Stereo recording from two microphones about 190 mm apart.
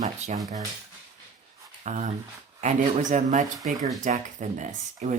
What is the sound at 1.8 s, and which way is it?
Speech, 40° right (ahead or behind).